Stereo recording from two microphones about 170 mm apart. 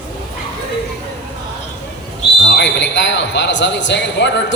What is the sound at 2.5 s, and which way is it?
A man's voice, 80° left.